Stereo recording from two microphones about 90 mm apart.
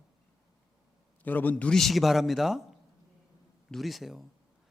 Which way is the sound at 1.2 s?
20° left (ahead or behind).